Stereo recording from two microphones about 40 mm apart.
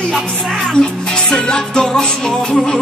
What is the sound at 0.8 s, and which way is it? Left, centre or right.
Speech, left.